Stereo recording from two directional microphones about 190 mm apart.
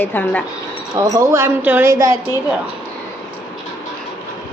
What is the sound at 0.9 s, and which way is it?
A woman's voice, 15° right (ahead or behind).